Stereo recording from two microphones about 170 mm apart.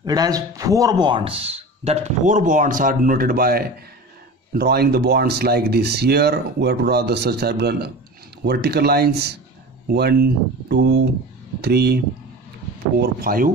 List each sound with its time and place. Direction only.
0.0 s speech: 20° right (ahead or behind); by 12.0 s 70° right (ahead or behind)
13.0 s speech: 60° right (ahead or behind)